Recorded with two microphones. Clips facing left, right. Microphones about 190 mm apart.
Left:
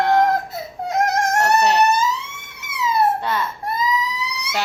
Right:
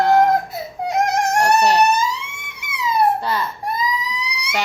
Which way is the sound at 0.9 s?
15° right (ahead or behind).